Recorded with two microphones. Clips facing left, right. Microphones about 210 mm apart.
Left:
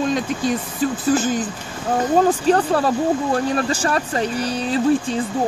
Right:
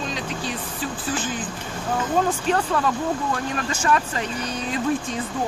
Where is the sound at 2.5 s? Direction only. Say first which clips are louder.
Left 5 dB; 35° left (ahead or behind).